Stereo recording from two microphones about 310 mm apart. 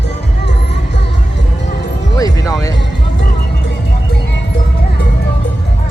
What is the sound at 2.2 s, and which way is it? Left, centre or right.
Music, centre.